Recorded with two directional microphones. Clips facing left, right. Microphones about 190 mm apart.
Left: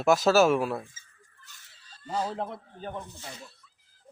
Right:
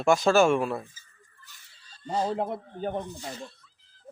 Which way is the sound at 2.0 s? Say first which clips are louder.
Right 3 dB; 30° right (ahead or behind).